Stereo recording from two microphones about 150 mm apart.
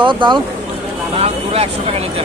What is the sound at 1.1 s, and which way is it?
Speech, 40° right (ahead or behind).